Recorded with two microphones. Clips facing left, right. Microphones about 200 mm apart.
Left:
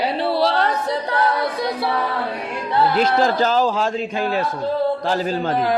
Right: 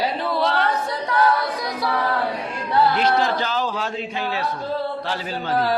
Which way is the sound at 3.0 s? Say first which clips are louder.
Left 3 dB; 45° left (ahead or behind).